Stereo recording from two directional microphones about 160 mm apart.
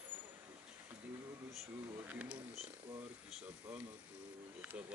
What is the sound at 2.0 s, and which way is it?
Speech, 10° right (ahead or behind).